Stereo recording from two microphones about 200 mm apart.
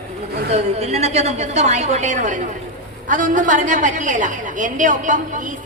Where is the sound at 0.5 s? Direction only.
35° right (ahead or behind).